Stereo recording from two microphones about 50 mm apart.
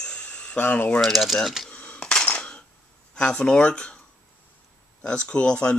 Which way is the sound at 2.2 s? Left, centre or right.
Left.